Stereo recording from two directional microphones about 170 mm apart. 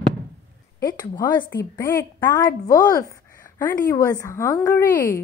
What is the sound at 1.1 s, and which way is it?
A woman's voice, 25° left (ahead or behind).